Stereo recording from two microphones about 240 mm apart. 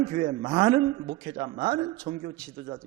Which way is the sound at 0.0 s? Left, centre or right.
Right.